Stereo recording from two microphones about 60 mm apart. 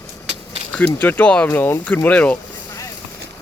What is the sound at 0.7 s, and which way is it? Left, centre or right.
Speech, left.